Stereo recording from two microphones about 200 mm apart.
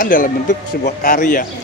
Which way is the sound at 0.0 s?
45° left (ahead or behind).